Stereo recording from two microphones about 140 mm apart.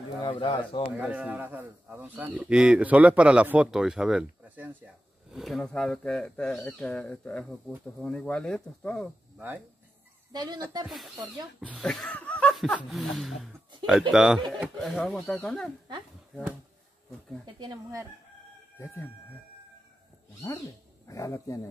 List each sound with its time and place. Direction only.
0.2 s speech: 35° left (ahead or behind)
0.9 s speech: 10° right (ahead or behind)
10.3 s speech: 30° right (ahead or behind)
10.9 s speech: centre (ahead or behind)
17.6 s speech: 30° right (ahead or behind)
21.1 s a man's voice: 20° left (ahead or behind)